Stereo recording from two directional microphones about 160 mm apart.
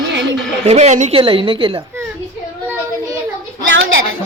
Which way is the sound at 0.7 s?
45° right (ahead or behind).